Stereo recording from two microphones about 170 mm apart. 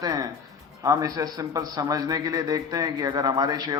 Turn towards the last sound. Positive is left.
turn(degrees=-25)  # may be behind; listen again after turning